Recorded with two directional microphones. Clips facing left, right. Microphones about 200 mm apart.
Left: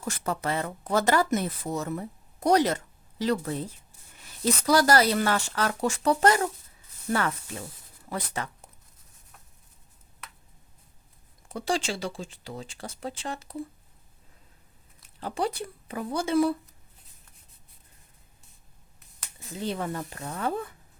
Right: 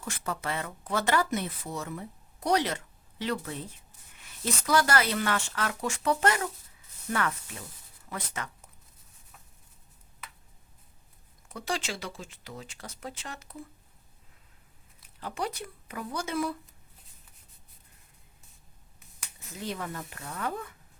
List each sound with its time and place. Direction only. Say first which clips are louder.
0.0 s speech: left 5 dB; 40° left (ahead or behind)
11.4 s speech: left 5 dB; 30° left (ahead or behind)
15.2 s speech: left 5 dB; 30° left (ahead or behind)
19.5 s speech: left 5 dB; 30° left (ahead or behind)